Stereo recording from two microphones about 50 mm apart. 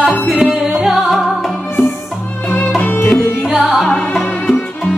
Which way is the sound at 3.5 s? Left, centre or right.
Centre.